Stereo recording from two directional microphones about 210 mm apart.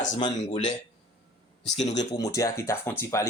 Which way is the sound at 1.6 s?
35° left (ahead or behind).